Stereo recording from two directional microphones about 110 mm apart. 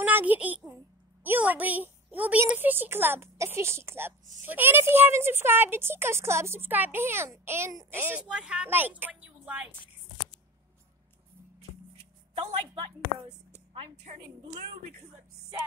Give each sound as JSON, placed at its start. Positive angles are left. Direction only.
{"t": 0.0, "sound": "a child's voice", "side_deg": -15}